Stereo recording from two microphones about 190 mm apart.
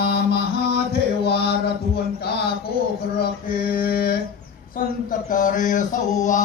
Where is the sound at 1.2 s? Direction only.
60° left (ahead or behind).